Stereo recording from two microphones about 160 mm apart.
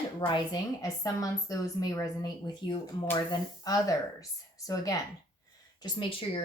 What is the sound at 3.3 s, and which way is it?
Speech, 25° left (ahead or behind).